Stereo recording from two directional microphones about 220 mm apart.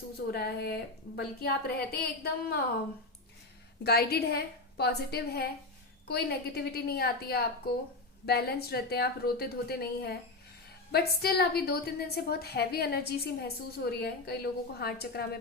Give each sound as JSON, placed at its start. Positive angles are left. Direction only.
{"t": 0.3, "sound": "a woman's voice", "side_deg": 45}
{"t": 3.8, "sound": "a woman's voice", "side_deg": 45}